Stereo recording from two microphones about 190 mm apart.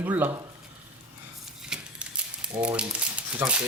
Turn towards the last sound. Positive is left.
turn(degrees=-5)  # may be behind; listen again after turning